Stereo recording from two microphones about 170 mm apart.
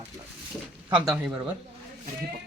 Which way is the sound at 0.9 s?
5° right (ahead or behind).